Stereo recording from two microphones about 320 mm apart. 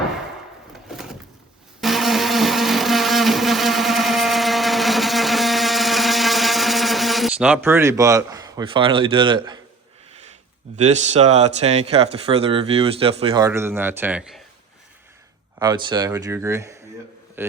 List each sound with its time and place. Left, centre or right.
0.9 s door: centre
1.8 s blender: centre
10.8 s speech: right; by 14.4 s centre
15.5 s speech: centre